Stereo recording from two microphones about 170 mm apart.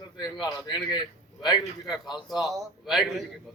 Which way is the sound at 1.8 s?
Centre (ahead or behind).